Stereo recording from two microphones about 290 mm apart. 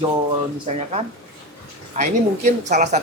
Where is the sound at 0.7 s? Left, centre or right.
Right.